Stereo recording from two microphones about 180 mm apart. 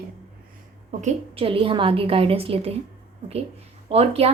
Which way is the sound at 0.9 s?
40° right (ahead or behind).